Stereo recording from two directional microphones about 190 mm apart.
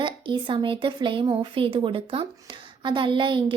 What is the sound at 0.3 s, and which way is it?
Speech, 25° right (ahead or behind).